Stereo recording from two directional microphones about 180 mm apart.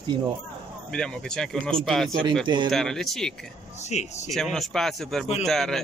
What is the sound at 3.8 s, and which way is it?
Speech, 40° left (ahead or behind).